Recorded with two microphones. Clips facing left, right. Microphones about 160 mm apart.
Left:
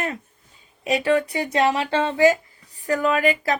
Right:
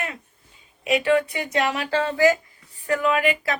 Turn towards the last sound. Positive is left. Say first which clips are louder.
# left 1 dB
turn(degrees=40)  # may be behind; listen again after turning